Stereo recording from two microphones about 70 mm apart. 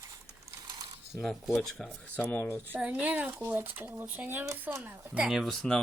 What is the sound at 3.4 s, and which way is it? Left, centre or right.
Speech, right.